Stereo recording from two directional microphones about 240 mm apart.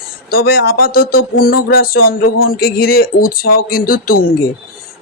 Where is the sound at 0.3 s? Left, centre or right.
Left.